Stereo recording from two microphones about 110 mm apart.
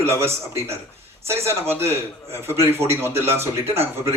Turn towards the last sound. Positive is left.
turn(degrees=-20)  # may be behind; listen again after turning